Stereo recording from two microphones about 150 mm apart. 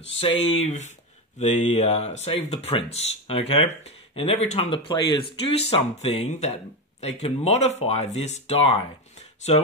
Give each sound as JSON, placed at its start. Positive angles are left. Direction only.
{"t": 0.2, "sound": "speech", "side_deg": 40}